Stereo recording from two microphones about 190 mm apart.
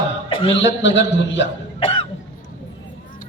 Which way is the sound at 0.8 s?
70° left (ahead or behind).